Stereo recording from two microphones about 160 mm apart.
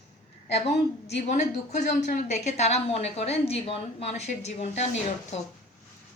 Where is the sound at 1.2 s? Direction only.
45° left (ahead or behind).